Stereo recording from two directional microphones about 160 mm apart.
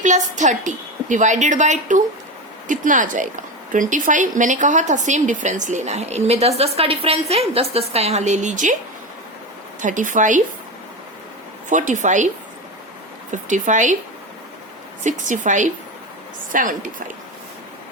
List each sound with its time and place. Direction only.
0.0 s a woman's voice: 50° right (ahead or behind)
9.8 s a woman's voice: 50° right (ahead or behind)
11.7 s a woman's voice: 50° right (ahead or behind)
13.3 s a woman's voice: 50° right (ahead or behind)
15.0 s a woman's voice: 50° right (ahead or behind)